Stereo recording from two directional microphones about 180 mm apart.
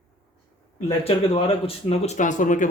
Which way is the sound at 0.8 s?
30° left (ahead or behind).